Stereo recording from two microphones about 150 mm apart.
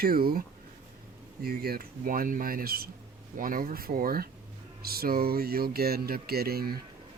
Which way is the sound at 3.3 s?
65° right (ahead or behind).